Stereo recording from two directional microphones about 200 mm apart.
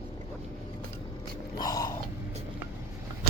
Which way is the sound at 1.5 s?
20° left (ahead or behind).